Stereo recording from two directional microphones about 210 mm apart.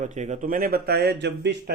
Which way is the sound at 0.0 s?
35° right (ahead or behind).